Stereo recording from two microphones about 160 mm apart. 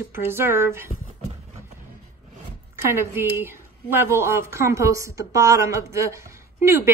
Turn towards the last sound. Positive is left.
turn(degrees=-20)  # may be behind; listen again after turning